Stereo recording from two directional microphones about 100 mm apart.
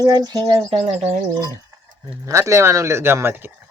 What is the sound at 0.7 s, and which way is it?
Speech, 90° right.